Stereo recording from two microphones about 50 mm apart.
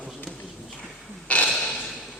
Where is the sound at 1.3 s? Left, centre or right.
Left.